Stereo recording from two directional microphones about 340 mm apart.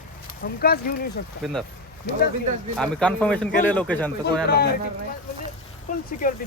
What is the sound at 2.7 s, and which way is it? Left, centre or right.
A man's voice, centre.